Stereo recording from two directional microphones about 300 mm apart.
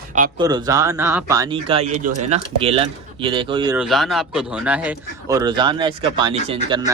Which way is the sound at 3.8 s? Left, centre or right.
Centre.